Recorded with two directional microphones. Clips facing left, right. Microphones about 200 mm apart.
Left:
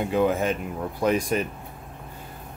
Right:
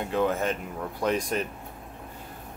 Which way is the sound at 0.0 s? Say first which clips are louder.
Left 3 dB; 10° left (ahead or behind).